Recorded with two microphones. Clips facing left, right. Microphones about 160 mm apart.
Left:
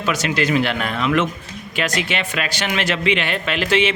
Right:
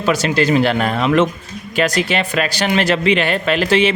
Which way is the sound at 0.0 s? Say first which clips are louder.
Right 5 dB; 35° right (ahead or behind).